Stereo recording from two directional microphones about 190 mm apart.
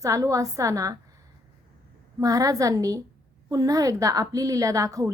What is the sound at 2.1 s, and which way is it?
A woman's voice, 15° right (ahead or behind).